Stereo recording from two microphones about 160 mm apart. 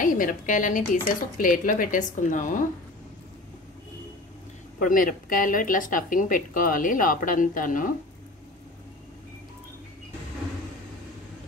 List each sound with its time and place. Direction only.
0.0 s a woman's voice: 55° left (ahead or behind)
4.7 s speech: 60° left (ahead or behind)